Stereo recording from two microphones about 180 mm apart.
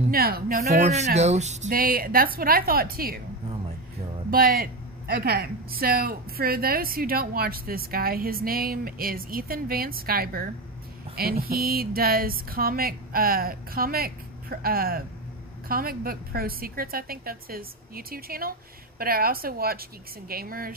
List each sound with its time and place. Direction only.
0.1 s speech: 55° right (ahead or behind)
0.8 s a woman's voice: 40° right (ahead or behind); by 3.2 s 55° right (ahead or behind)
4.3 s speech: 55° right (ahead or behind)